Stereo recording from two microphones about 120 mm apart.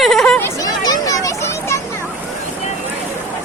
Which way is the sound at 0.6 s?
35° left (ahead or behind).